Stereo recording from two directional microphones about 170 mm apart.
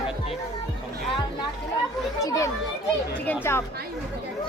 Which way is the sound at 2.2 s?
20° left (ahead or behind).